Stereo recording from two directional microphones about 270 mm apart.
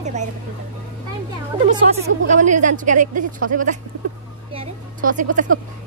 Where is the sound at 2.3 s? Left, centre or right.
Right.